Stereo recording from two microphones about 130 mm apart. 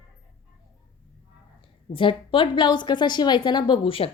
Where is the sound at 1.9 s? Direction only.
40° left (ahead or behind).